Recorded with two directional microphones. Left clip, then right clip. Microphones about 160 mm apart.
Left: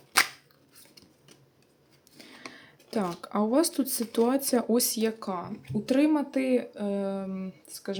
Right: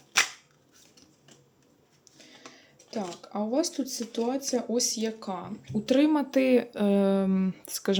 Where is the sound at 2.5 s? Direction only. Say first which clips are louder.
Left 4 dB; 30° left (ahead or behind); by 5.4 s 15° left (ahead or behind).